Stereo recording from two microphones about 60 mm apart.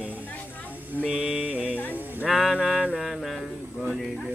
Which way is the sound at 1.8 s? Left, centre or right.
Left.